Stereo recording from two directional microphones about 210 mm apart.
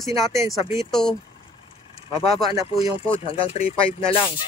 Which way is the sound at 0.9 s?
Centre (ahead or behind).